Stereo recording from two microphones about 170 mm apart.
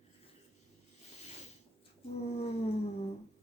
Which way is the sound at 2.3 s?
40° left (ahead or behind).